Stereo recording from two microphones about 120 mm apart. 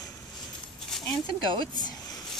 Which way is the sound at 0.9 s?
Centre (ahead or behind).